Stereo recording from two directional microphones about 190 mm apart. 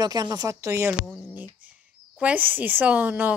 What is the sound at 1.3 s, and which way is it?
Speech, 10° right (ahead or behind).